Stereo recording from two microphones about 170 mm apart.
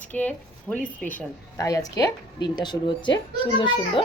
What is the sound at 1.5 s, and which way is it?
A child's voice, 20° left (ahead or behind).